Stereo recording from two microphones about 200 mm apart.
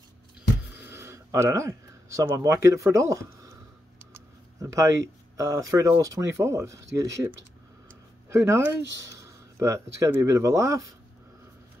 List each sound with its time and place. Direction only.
0.7 s speech: 10° right (ahead or behind)